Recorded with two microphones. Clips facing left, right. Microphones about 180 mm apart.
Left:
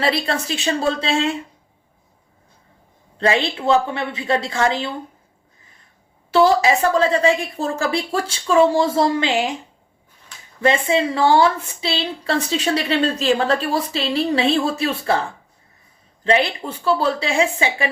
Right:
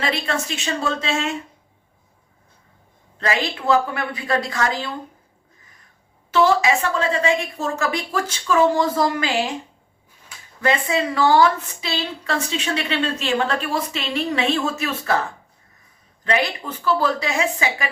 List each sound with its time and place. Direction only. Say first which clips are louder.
0.0 s a woman's voice: left 3 dB; 35° left (ahead or behind)
3.2 s a woman's voice: left 4 dB; 30° left (ahead or behind)
6.3 s a woman's voice: left 2 dB; 35° left (ahead or behind)
10.6 s a woman's voice: left 3 dB; 25° left (ahead or behind)
16.2 s a woman's voice: left 4 dB; 30° left (ahead or behind)